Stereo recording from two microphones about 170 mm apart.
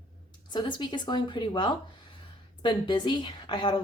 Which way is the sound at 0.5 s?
25° left (ahead or behind).